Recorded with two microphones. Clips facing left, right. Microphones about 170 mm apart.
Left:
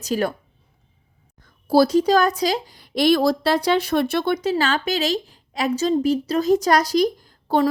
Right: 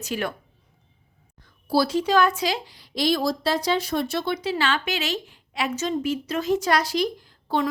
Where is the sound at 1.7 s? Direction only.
40° left (ahead or behind).